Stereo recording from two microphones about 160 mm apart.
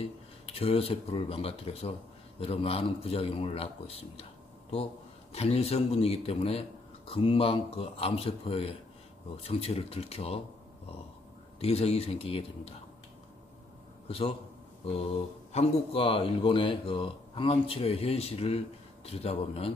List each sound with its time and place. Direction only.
0.5 s speech: 35° left (ahead or behind)
11.6 s speech: 40° left (ahead or behind)
14.0 s a man's voice: 35° left (ahead or behind)